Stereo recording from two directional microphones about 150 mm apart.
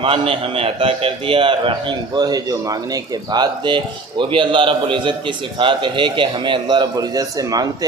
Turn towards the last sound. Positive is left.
turn(degrees=-25)  # may be behind; listen again after turning